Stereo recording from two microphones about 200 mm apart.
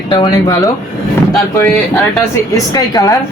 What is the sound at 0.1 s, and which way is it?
Speech, 25° left (ahead or behind).